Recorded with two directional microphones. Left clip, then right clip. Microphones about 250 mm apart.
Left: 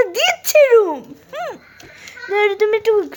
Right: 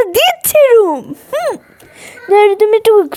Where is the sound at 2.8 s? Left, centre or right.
Right.